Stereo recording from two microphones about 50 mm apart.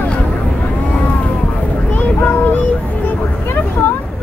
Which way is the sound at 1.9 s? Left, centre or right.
Left.